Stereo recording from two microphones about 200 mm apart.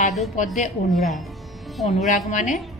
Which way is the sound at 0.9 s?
Centre (ahead or behind).